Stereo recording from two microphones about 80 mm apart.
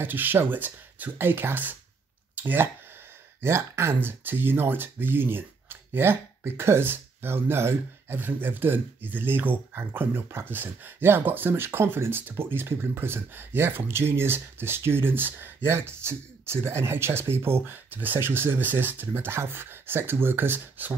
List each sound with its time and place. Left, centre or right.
0.0 s speech: right